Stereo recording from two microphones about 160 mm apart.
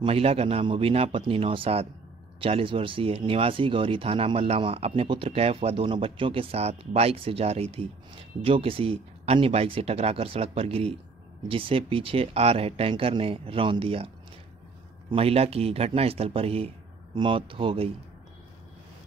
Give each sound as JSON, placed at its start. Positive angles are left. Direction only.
{"t": 0.0, "sound": "speech", "side_deg": -40}